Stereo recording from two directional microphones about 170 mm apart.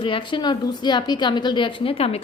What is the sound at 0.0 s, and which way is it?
A woman's voice, 30° left (ahead or behind).